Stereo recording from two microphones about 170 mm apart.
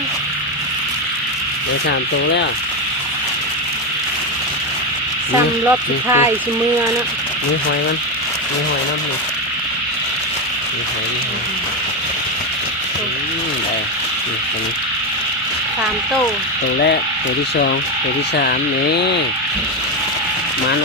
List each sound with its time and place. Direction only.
5.6 s speech: 10° right (ahead or behind)
18.3 s speech: 75° left (ahead or behind)